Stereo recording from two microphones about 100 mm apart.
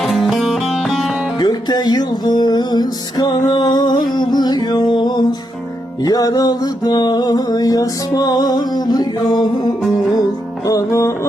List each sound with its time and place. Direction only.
0.0 s music: centre (ahead or behind)
1.4 s music: 45° left (ahead or behind)
10.7 s music: 35° left (ahead or behind)